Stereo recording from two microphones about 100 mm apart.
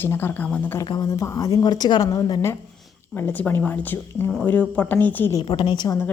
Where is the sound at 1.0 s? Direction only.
35° left (ahead or behind).